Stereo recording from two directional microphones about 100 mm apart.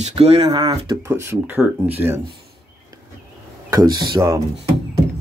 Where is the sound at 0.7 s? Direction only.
50° right (ahead or behind).